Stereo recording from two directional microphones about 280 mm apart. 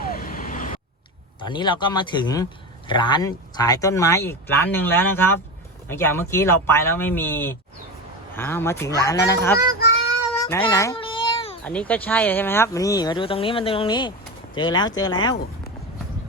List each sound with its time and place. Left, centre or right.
0.0 s vehicle: left
1.4 s a man's voice: centre
10.4 s baby cry: centre
11.6 s a man's voice: centre